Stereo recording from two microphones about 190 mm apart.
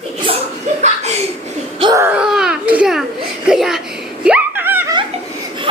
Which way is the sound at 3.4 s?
Centre (ahead or behind).